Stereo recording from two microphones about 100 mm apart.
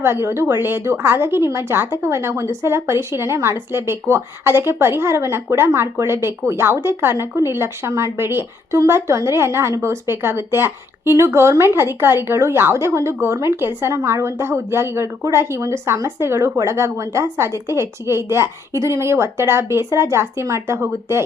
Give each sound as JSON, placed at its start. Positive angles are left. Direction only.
{"t": 0.0, "sound": "a woman's voice", "side_deg": -25}